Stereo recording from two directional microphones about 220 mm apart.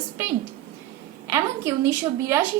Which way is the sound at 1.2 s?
15° right (ahead or behind).